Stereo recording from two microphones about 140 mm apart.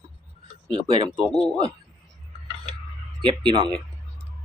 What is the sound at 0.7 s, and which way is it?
Speech, 40° right (ahead or behind).